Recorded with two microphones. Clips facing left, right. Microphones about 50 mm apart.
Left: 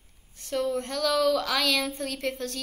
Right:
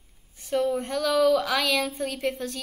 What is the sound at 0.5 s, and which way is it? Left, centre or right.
A woman's voice, centre.